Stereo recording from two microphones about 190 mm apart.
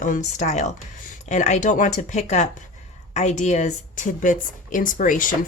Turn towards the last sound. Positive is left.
turn(degrees=45)  # may be behind; listen again after turning